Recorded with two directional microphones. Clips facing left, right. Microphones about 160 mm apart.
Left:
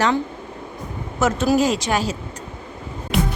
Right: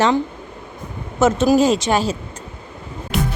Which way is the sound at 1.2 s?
25° right (ahead or behind).